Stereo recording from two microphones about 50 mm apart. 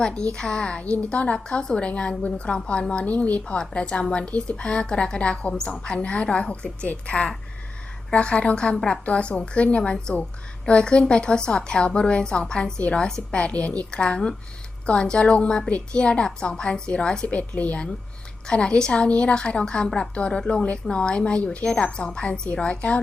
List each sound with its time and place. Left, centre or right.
0.0 s a woman's voice: centre